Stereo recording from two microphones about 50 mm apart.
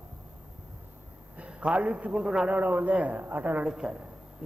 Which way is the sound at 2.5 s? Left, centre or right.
Right.